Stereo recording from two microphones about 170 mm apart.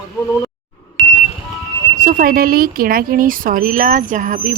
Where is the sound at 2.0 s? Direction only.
50° right (ahead or behind).